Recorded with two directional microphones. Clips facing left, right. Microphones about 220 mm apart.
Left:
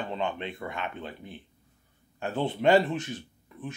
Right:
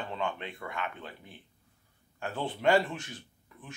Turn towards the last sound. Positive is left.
turn(degrees=20)  # may be behind; listen again after turning